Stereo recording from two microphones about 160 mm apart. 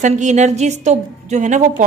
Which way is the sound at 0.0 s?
50° right (ahead or behind).